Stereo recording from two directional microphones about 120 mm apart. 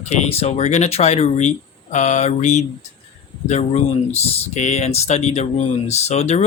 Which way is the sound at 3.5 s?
65° left (ahead or behind).